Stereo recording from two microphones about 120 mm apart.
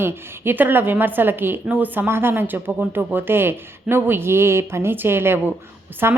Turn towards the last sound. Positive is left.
turn(degrees=-20)  # may be behind; listen again after turning